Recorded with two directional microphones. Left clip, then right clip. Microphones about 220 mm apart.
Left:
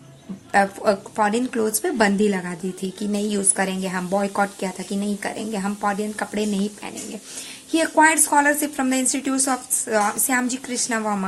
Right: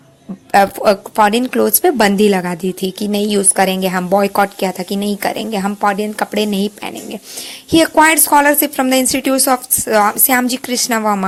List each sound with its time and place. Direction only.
0.5 s a woman's voice: 35° right (ahead or behind)